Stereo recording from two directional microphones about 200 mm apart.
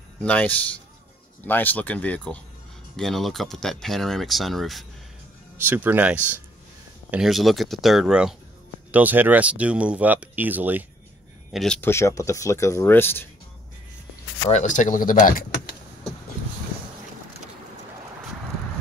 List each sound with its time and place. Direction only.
0.2 s speech: 5° left (ahead or behind); by 10.9 s 10° right (ahead or behind)
11.5 s speech: 5° left (ahead or behind)
14.5 s speech: 35° left (ahead or behind)